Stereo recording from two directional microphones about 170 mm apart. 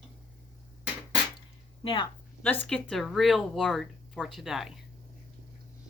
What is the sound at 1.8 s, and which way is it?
Speech, 30° left (ahead or behind).